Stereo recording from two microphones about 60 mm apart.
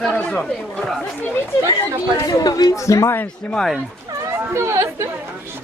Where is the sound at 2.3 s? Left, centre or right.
Left.